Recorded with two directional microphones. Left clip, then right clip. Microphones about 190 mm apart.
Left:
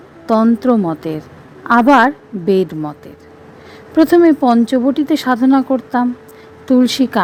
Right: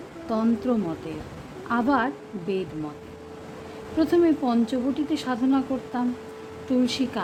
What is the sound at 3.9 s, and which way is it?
Speech, 45° left (ahead or behind).